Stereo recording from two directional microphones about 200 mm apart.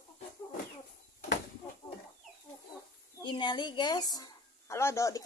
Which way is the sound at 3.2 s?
20° left (ahead or behind).